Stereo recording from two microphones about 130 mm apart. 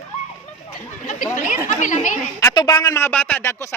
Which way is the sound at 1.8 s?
75° left (ahead or behind).